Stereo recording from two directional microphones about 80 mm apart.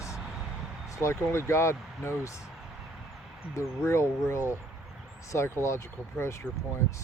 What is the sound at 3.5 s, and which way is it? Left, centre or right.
Speech, left.